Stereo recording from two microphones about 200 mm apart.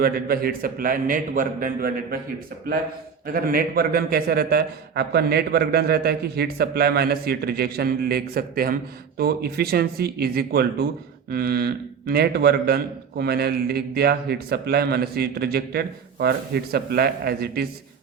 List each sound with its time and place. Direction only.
0.0 s a man's voice: 50° right (ahead or behind)
3.3 s a man's voice: 45° right (ahead or behind)